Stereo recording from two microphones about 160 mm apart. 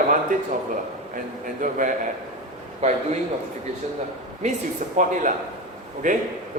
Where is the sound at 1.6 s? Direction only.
55° right (ahead or behind).